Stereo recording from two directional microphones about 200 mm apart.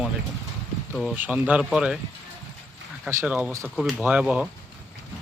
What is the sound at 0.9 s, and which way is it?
Speech, centre (ahead or behind).